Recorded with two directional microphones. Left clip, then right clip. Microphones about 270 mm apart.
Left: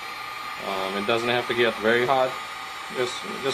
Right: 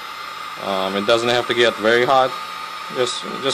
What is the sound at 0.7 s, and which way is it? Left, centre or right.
Speech, right.